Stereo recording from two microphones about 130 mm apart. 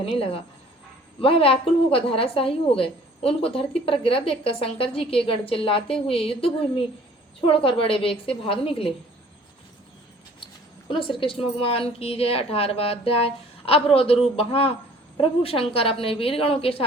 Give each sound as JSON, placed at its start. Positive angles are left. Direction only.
{"t": 0.0, "sound": "a woman's voice", "side_deg": 45}
{"t": 10.8, "sound": "a woman's voice", "side_deg": 40}